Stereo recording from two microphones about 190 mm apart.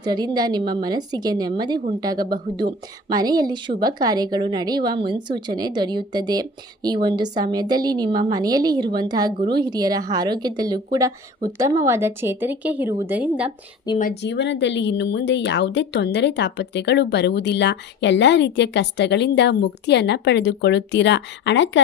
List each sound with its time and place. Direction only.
0.0 s a woman's voice: 20° right (ahead or behind)
14.0 s a woman's voice: 60° left (ahead or behind)